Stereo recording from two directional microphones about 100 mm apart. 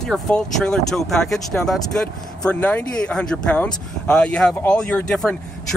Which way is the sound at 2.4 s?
15° left (ahead or behind).